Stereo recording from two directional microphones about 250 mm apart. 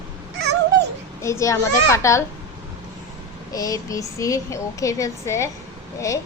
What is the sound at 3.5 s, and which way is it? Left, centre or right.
A woman's voice, centre.